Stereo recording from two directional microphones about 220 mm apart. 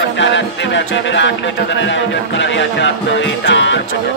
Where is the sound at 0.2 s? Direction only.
55° left (ahead or behind).